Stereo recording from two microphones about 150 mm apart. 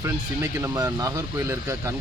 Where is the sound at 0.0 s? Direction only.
20° right (ahead or behind).